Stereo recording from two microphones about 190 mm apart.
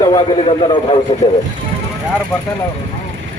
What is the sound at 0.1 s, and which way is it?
Speech, 25° left (ahead or behind).